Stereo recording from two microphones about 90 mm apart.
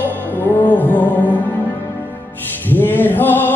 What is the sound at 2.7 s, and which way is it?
Choir, 20° left (ahead or behind).